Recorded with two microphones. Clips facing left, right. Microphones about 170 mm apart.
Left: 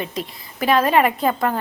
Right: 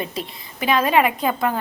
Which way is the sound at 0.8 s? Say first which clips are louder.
Left 1 dB; 5° right (ahead or behind).